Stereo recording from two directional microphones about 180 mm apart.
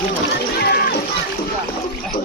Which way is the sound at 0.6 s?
65° left (ahead or behind).